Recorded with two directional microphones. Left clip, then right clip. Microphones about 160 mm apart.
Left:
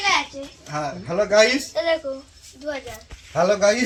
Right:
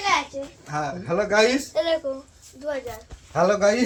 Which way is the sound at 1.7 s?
40° right (ahead or behind).